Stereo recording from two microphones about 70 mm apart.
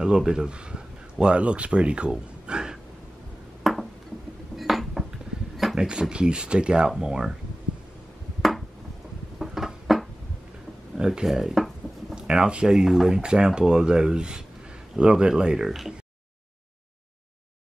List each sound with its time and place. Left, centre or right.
0.0 s speech: centre
3.6 s a sound: centre
4.6 s dishes: centre
5.8 s speech: centre
8.4 s ping: centre
9.4 s a sound: centre
12.2 s speech: centre